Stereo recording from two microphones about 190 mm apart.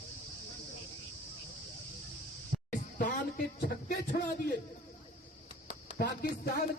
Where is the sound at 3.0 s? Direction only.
50° left (ahead or behind).